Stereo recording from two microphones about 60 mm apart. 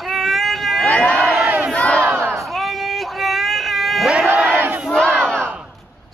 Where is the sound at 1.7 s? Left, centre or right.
Left.